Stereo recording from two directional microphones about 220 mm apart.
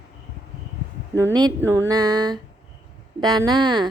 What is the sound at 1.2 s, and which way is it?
A woman's voice, 15° right (ahead or behind).